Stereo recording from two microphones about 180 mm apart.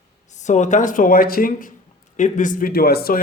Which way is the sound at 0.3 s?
40° left (ahead or behind).